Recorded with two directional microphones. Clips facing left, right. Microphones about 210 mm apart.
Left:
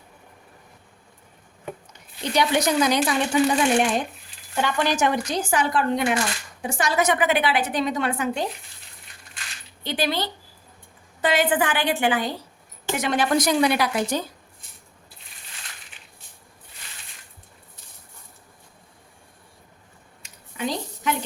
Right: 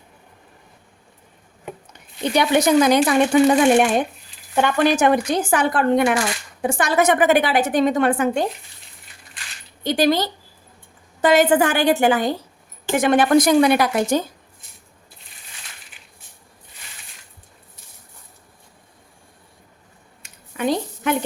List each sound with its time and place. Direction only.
2.3 s a woman's voice: 55° right (ahead or behind)
9.8 s a woman's voice: 40° right (ahead or behind)
20.2 s a sound: 55° right (ahead or behind)